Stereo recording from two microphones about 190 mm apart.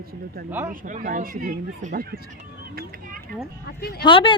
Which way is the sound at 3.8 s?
60° left (ahead or behind).